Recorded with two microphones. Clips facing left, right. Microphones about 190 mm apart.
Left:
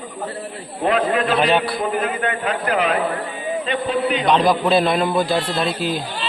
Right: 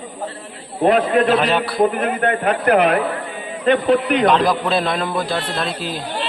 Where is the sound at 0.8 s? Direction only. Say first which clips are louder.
Right 4 dB; 40° right (ahead or behind).